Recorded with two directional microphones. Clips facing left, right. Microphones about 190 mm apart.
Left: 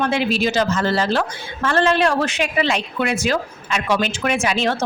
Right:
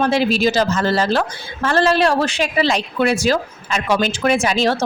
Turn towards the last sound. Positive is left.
turn(degrees=-35)  # may be behind; listen again after turning